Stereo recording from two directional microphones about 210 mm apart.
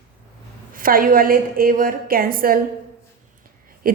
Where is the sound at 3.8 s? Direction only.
40° right (ahead or behind).